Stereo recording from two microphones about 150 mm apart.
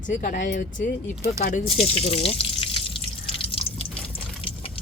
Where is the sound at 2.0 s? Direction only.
40° left (ahead or behind).